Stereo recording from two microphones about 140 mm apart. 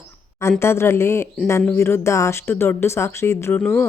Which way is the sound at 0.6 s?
20° left (ahead or behind).